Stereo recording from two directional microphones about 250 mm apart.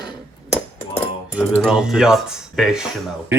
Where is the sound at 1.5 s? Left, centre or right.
Centre.